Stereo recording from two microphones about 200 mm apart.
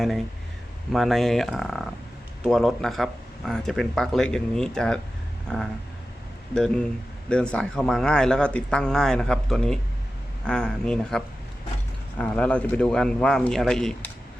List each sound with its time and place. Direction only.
0.9 s speech: centre (ahead or behind)